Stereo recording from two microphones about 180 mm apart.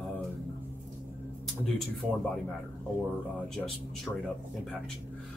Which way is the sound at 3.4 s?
Centre (ahead or behind).